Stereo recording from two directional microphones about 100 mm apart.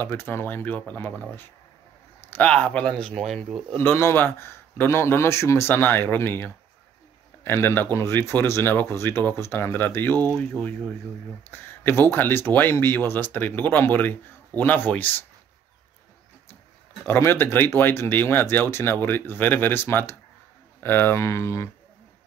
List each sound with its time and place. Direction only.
0.0 s speech: 20° left (ahead or behind)
2.3 s speech: 15° left (ahead or behind)
3.7 s speech: 25° left (ahead or behind)
11.5 s speech: 20° left (ahead or behind)
17.0 s speech: 25° left (ahead or behind)